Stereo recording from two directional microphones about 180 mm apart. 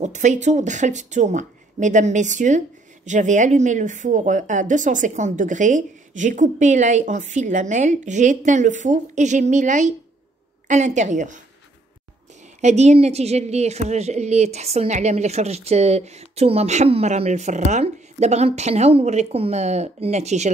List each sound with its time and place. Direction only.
0.0 s a woman's voice: 40° right (ahead or behind)
12.5 s a woman's voice: 40° right (ahead or behind)